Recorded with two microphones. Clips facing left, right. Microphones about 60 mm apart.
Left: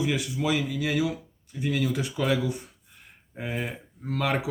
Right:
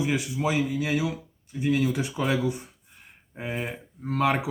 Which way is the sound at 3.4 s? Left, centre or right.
Centre.